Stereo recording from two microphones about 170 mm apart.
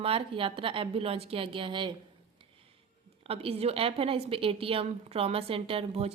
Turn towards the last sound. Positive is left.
turn(degrees=-35)  # may be behind; listen again after turning